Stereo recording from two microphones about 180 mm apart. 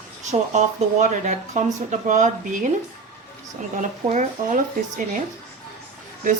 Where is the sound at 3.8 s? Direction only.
45° right (ahead or behind).